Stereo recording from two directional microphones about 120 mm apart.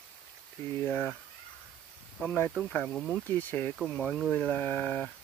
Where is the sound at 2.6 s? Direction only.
5° left (ahead or behind).